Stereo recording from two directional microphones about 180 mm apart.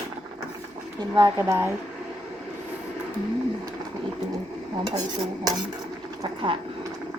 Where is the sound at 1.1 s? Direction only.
20° right (ahead or behind).